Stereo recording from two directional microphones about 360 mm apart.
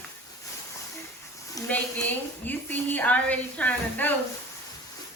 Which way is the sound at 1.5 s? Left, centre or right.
Centre.